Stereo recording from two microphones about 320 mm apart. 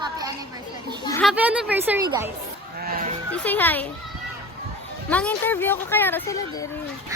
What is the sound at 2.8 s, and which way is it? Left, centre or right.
Goat, right.